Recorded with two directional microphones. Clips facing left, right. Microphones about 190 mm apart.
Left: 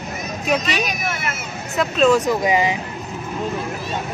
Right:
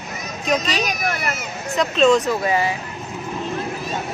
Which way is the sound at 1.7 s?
5° left (ahead or behind).